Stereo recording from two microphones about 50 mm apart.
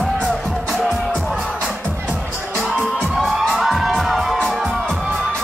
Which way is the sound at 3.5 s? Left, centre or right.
Centre.